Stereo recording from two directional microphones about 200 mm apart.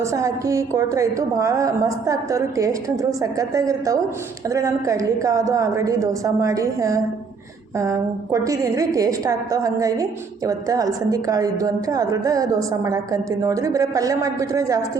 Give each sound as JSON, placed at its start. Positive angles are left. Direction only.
{"t": 0.0, "sound": "a woman's voice", "side_deg": -15}